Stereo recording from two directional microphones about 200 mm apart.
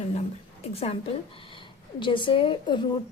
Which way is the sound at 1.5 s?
25° left (ahead or behind).